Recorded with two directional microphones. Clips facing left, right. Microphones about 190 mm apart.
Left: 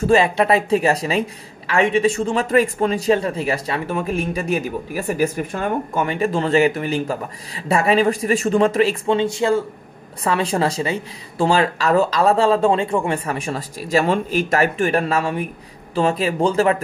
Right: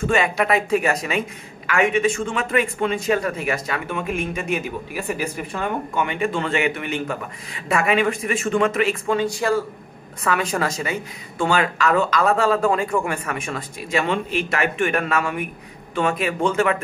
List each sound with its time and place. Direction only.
0.0 s a man's voice: 30° left (ahead or behind)